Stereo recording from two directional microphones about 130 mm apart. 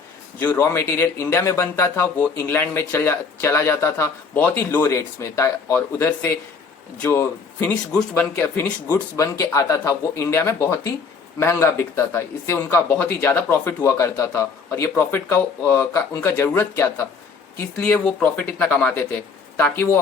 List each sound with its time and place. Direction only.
0.3 s speech: 20° left (ahead or behind)
8.9 s speech: 25° left (ahead or behind)